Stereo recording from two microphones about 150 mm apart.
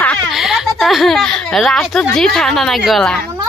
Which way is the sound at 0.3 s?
Centre (ahead or behind).